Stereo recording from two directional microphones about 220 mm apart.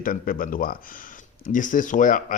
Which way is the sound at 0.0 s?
40° left (ahead or behind).